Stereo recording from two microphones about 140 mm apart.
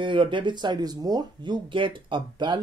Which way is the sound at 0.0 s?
35° right (ahead or behind).